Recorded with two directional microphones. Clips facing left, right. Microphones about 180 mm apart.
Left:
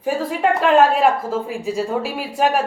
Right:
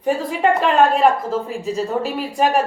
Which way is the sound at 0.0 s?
Centre (ahead or behind).